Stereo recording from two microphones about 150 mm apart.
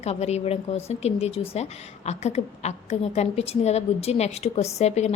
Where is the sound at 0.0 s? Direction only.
45° left (ahead or behind).